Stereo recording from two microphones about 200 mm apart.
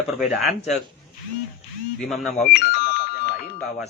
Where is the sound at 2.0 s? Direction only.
Centre (ahead or behind).